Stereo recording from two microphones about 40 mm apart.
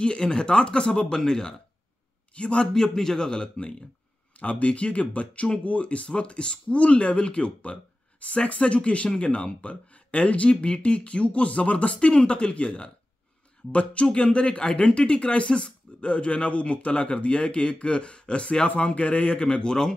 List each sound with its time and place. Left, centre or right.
0.0 s speech: left
2.3 s speech: left
4.4 s speech: left; by 19.9 s centre